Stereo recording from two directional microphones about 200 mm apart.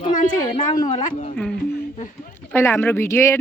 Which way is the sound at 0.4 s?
25° left (ahead or behind).